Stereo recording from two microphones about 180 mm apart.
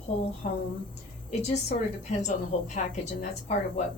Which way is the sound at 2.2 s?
40° left (ahead or behind).